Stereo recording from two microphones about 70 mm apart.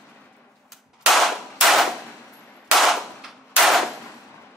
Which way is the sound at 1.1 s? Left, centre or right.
Centre.